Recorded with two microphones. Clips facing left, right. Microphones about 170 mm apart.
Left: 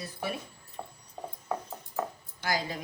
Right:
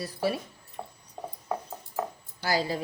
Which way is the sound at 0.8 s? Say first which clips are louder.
Right 2 dB; 10° right (ahead or behind).